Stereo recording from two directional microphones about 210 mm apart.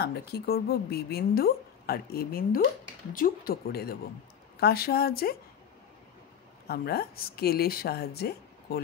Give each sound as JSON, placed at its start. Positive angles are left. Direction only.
{"t": 0.0, "sound": "a woman's voice", "side_deg": 50}
{"t": 6.7, "sound": "a woman's voice", "side_deg": 45}